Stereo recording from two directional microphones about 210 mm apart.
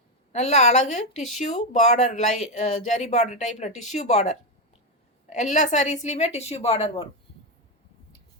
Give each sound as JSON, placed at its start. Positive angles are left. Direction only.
{"t": 0.3, "sound": "speech", "side_deg": 30}